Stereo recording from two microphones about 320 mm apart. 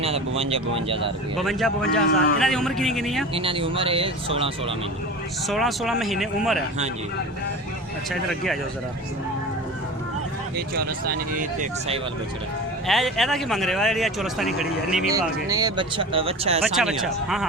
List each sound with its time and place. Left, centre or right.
0.0 s speech: centre
1.4 s speech: centre
2.0 s speech: left
2.4 s speech: centre
3.3 s speech: centre
5.5 s speech: centre
8.1 s speech: centre
11.0 s speech: right
12.9 s speech: centre
16.7 s speech: centre